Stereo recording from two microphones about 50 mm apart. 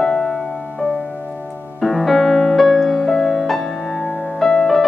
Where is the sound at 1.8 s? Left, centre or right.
Centre.